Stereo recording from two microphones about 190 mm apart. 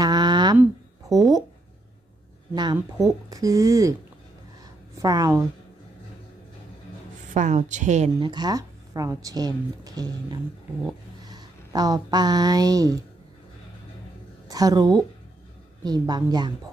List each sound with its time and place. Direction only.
0.0 s a sound: 20° right (ahead or behind)
2.5 s speech: 20° right (ahead or behind)
4.9 s a woman's voice: 20° right (ahead or behind)
7.3 s a woman's voice: 40° right (ahead or behind)
8.2 s a woman's voice: 20° right (ahead or behind)
14.5 s speech: 20° right (ahead or behind)